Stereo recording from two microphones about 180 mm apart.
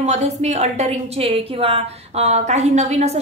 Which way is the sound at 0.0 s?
40° right (ahead or behind).